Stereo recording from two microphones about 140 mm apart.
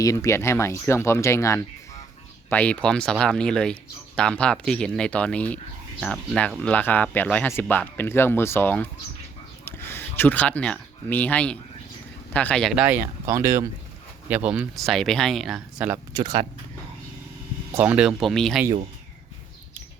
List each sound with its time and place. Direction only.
0.0 s speech: 25° left (ahead or behind)
2.5 s speech: 10° left (ahead or behind)
12.7 s speech: 10° right (ahead or behind)
13.2 s speech: 20° right (ahead or behind)
14.3 s speech: 10° right (ahead or behind)
14.8 s speech: 5° left (ahead or behind)
16.1 s speech: 30° right (ahead or behind)
17.7 s speech: 10° right (ahead or behind)